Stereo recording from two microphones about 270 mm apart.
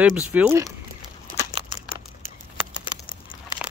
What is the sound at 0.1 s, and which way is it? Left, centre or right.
Speech, centre.